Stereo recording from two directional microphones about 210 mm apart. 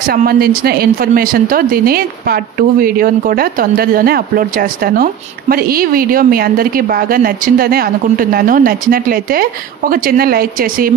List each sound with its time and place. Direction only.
0.0 s a woman's voice: 45° right (ahead or behind)